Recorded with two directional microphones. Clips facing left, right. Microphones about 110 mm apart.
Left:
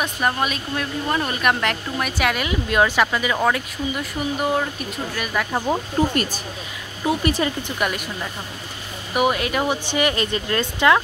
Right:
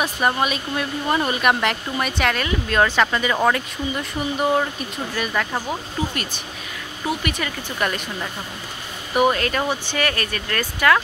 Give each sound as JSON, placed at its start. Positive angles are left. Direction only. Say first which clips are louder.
{"t": 0.0, "sound": "speech", "louder": "right 1 dB", "side_deg": -5}
{"t": 6.0, "sound": "speech", "louder": "left 6 dB", "side_deg": 45}
{"t": 7.1, "sound": "speech", "louder": "left 5 dB", "side_deg": 30}
{"t": 7.8, "sound": "speech", "louder": "even", "side_deg": 10}
{"t": 9.1, "sound": "speech", "louder": "right 1 dB", "side_deg": 10}